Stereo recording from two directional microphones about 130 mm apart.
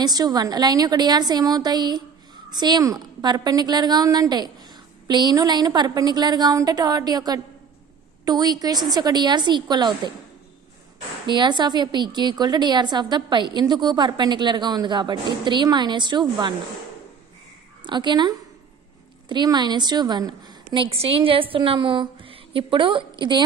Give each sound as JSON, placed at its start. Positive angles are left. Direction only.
{"t": 0.0, "sound": "a woman's voice", "side_deg": -30}
{"t": 11.2, "sound": "a woman's voice", "side_deg": -35}
{"t": 17.8, "sound": "a woman's voice", "side_deg": -35}